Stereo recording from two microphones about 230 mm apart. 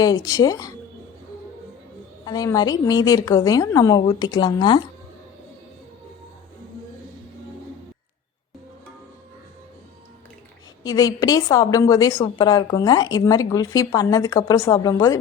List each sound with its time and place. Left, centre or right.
0.0 s a woman's voice: centre
2.2 s a woman's voice: centre
10.8 s a woman's voice: centre